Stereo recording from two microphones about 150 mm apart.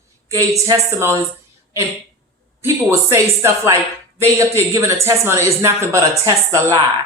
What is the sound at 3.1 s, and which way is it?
Speech, 20° right (ahead or behind).